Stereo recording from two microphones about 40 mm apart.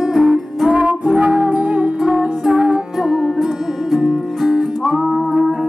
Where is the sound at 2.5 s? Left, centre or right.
Right.